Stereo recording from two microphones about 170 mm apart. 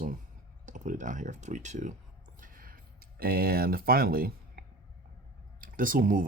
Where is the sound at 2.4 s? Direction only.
55° right (ahead or behind).